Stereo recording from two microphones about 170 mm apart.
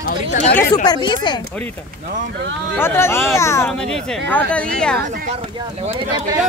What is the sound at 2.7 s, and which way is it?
Speech, 15° left (ahead or behind).